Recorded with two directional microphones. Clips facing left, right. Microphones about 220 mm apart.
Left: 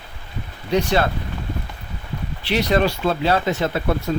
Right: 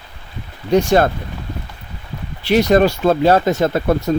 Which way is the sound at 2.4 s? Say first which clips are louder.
Right 6 dB; 45° right (ahead or behind).